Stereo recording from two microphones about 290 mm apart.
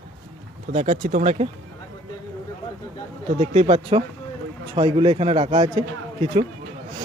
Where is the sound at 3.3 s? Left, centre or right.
Right.